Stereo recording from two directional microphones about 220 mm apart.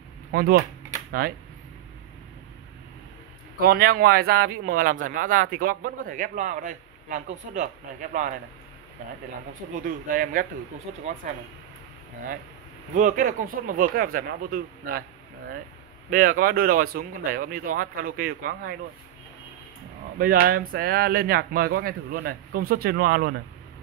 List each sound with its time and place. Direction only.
0.3 s a sound: 40° right (ahead or behind)
3.6 s speech: 45° right (ahead or behind)
9.8 s speech: 40° right (ahead or behind)
12.9 s speech: 35° right (ahead or behind)
16.1 s speech: 40° right (ahead or behind)
20.2 s speech: 40° right (ahead or behind)